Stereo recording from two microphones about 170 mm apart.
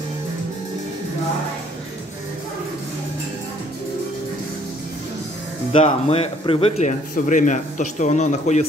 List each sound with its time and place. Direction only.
5.7 s speech: 35° left (ahead or behind)
7.2 s a man's voice: 50° left (ahead or behind)